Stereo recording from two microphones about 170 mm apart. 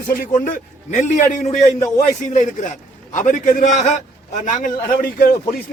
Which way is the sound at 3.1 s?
50° left (ahead or behind).